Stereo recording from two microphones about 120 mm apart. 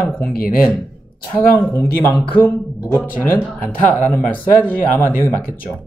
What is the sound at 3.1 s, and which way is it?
Speech, 15° left (ahead or behind).